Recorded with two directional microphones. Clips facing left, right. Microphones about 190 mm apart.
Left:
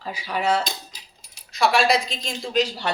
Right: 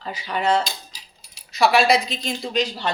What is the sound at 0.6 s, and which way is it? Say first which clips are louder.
Keys jangling: left 1 dB; 55° left (ahead or behind).